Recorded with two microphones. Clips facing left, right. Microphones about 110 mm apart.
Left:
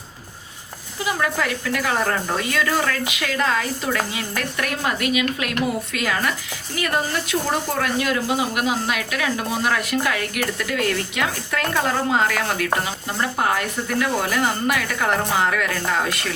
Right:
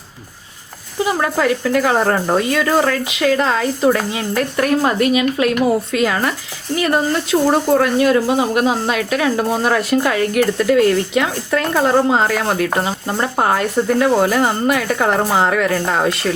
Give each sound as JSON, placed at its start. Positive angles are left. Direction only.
{"t": 1.0, "sound": "a woman's voice", "side_deg": -35}